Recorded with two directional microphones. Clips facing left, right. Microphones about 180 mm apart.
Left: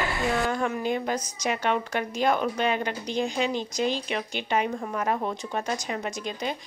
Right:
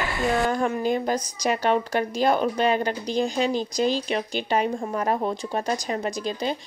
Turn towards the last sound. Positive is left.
turn(degrees=-35)  # may be behind; listen again after turning